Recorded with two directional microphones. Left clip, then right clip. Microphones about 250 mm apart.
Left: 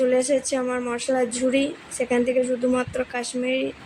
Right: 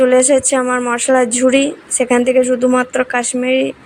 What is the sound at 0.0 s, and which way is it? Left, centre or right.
A woman's voice, centre.